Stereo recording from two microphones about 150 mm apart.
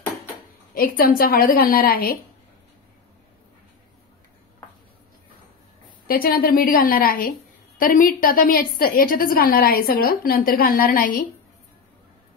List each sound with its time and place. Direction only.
0.7 s a woman's voice: 75° left (ahead or behind)
6.0 s a woman's voice: 75° left (ahead or behind)